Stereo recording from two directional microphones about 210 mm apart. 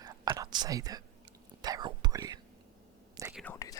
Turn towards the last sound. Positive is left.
turn(degrees=10)  # may be behind; listen again after turning